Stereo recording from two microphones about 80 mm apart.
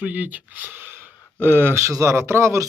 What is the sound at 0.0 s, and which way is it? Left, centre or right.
Speech, right.